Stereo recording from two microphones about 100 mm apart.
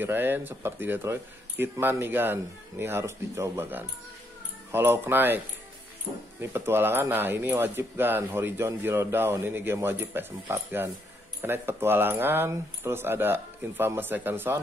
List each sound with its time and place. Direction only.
0.0 s speech: 20° right (ahead or behind)
6.4 s speech: 25° right (ahead or behind)